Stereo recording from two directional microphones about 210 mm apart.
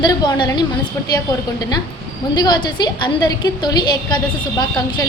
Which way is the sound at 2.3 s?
20° left (ahead or behind).